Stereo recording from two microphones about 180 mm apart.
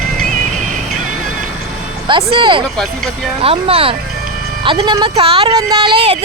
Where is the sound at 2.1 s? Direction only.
30° right (ahead or behind).